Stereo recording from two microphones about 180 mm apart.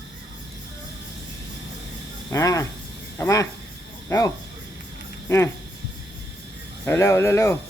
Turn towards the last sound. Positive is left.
turn(degrees=15)  # may be behind; listen again after turning